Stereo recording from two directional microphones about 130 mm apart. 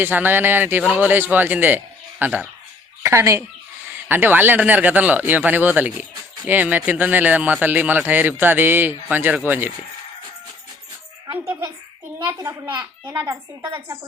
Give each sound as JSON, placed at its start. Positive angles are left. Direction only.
{"t": 0.0, "sound": "speech", "side_deg": -15}
{"t": 12.5, "sound": "speech", "side_deg": -15}